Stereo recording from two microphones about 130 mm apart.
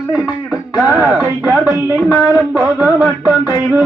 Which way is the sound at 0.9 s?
15° right (ahead or behind).